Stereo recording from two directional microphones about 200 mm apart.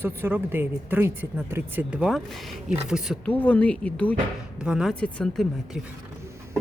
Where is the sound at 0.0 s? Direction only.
10° right (ahead or behind).